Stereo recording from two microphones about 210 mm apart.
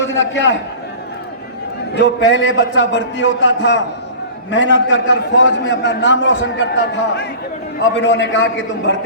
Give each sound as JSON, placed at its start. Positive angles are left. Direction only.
{"t": 0.1, "sound": "a man's voice", "side_deg": 65}
{"t": 1.9, "sound": "a man's voice", "side_deg": 60}